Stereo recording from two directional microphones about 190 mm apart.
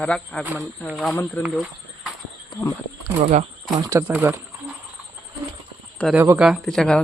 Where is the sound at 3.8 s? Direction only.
15° right (ahead or behind).